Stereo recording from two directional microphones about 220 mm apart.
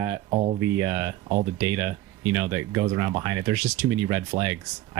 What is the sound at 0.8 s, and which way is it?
Speech, 10° right (ahead or behind).